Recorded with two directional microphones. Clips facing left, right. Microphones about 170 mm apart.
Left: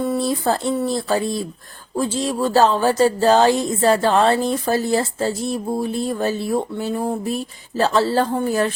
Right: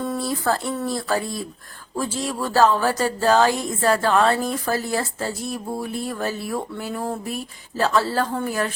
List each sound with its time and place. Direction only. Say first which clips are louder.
0.2 s a woman's voice: left 3 dB; 20° left (ahead or behind)
6.9 s a sound: left 4 dB; 15° left (ahead or behind)
7.3 s a woman's voice: left 6 dB; 25° left (ahead or behind)